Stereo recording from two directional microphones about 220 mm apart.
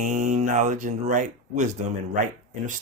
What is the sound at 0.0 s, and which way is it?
Speech, 35° right (ahead or behind).